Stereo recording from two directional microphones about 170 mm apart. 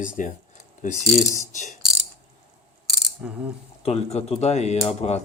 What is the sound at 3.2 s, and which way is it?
Speech, 5° right (ahead or behind).